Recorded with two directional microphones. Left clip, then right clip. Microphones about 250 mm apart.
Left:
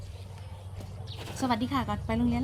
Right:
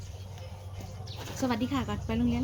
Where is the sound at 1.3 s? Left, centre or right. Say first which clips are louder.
Left 2 dB; left.